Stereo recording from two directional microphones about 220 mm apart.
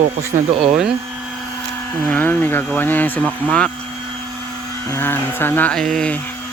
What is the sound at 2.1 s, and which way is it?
Speech, 5° left (ahead or behind).